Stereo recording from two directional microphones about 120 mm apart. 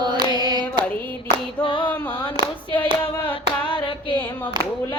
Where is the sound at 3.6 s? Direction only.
45° left (ahead or behind).